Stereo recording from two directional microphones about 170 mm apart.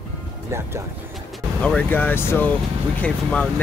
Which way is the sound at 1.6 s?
10° left (ahead or behind).